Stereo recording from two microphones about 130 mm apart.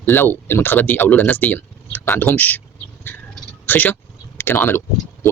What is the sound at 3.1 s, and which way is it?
Cat, 15° left (ahead or behind).